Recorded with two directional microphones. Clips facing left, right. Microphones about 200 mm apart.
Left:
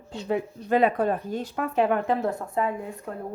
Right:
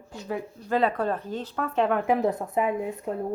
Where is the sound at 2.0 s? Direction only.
15° right (ahead or behind).